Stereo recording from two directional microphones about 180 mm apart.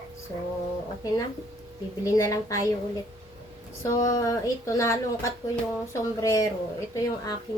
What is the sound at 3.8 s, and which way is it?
A woman's voice, 20° left (ahead or behind).